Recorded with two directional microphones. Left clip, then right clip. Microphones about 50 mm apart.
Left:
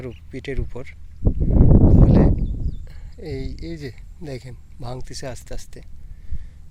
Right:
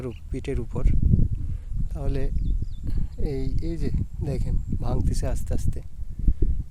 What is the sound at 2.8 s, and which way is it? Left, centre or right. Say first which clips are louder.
Speech: right 4 dB; right.